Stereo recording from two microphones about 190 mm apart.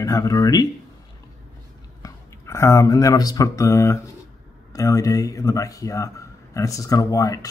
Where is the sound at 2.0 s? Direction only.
15° left (ahead or behind).